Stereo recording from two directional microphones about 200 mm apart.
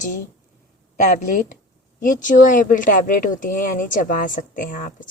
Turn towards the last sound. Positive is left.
turn(degrees=40)  # may be behind; listen again after turning